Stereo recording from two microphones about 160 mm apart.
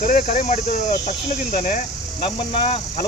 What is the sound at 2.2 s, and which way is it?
Speech, 35° left (ahead or behind).